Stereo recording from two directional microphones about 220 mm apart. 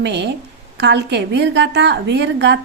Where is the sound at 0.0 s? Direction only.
50° right (ahead or behind).